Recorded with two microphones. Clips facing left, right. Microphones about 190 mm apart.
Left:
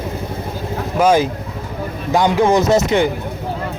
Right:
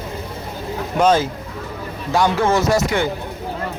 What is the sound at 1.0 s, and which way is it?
Speech, 10° left (ahead or behind).